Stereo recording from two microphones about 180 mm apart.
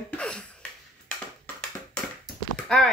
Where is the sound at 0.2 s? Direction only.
5° left (ahead or behind).